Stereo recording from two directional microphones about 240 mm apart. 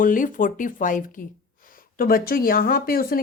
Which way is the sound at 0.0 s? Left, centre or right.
Left.